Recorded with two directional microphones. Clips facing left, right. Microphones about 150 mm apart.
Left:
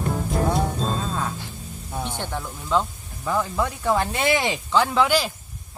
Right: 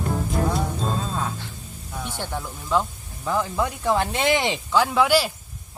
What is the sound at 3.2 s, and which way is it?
Speech, 10° right (ahead or behind).